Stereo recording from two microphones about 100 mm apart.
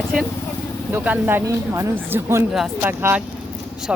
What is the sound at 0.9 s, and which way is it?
Speech, 20° right (ahead or behind).